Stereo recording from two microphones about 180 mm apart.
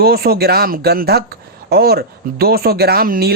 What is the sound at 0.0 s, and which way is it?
A man's voice, 60° right (ahead or behind).